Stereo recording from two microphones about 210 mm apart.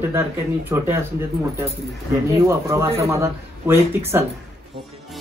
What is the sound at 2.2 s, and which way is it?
Speech, 15° right (ahead or behind).